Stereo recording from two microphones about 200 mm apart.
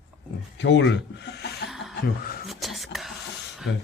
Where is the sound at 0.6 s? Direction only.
65° left (ahead or behind).